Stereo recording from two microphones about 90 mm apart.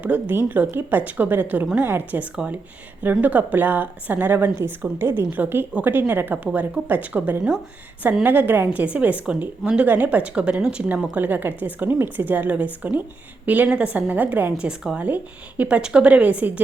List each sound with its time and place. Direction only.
0.0 s a woman's voice: 20° right (ahead or behind)
2.3 s a woman's voice: 10° right (ahead or behind)
3.0 s a woman's voice: 20° right (ahead or behind)
8.2 s a woman's voice: 20° right (ahead or behind)